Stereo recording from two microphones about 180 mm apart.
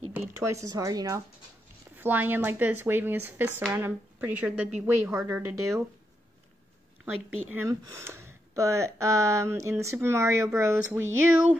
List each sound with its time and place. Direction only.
0.6 s speech: 20° right (ahead or behind)
7.5 s speech: 15° right (ahead or behind)